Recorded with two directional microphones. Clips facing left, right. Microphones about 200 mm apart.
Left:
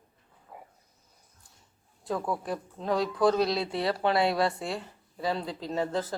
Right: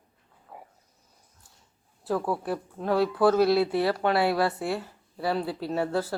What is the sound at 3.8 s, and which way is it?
Speech, 25° left (ahead or behind).